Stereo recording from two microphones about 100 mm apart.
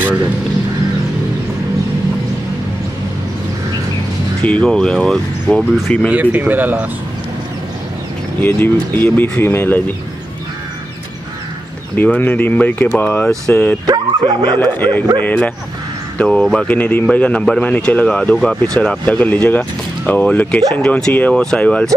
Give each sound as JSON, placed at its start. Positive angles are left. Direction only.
{"t": 4.4, "sound": "speech", "side_deg": 10}
{"t": 6.0, "sound": "speech", "side_deg": -15}
{"t": 8.4, "sound": "speech", "side_deg": 20}
{"t": 12.0, "sound": "speech", "side_deg": 15}
{"t": 13.8, "sound": "speech", "side_deg": -45}
{"t": 14.6, "sound": "speech", "side_deg": 20}